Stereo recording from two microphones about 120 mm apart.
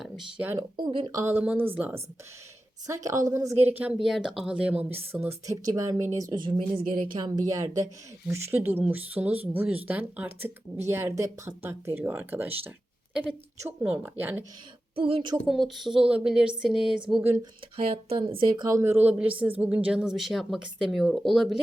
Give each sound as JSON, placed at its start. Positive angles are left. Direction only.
{"t": 0.0, "sound": "speech", "side_deg": -10}
{"t": 0.9, "sound": "speech", "side_deg": -45}
{"t": 1.1, "sound": "speech", "side_deg": -20}
{"t": 2.8, "sound": "a woman's voice", "side_deg": -25}
{"t": 4.0, "sound": "speech", "side_deg": 0}
{"t": 7.3, "sound": "a woman's voice", "side_deg": -30}
{"t": 13.8, "sound": "speech", "side_deg": -15}
{"t": 14.9, "sound": "speech", "side_deg": -50}
{"t": 15.4, "sound": "speech", "side_deg": 0}
{"t": 17.7, "sound": "speech", "side_deg": -55}
{"t": 18.7, "sound": "speech", "side_deg": -20}